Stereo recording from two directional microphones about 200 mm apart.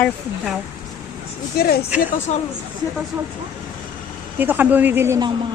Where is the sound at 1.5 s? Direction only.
50° left (ahead or behind).